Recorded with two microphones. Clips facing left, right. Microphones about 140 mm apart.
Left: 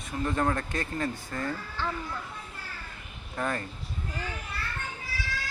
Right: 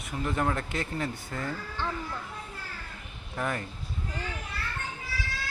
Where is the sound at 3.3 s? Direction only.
5° right (ahead or behind).